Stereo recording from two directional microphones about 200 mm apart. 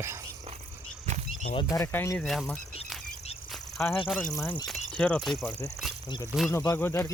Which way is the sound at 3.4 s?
Centre (ahead or behind).